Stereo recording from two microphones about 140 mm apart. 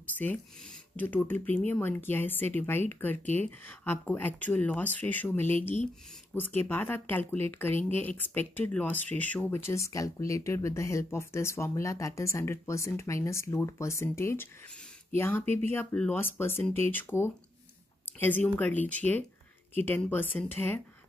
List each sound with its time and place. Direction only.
0.9 s speech: 15° left (ahead or behind)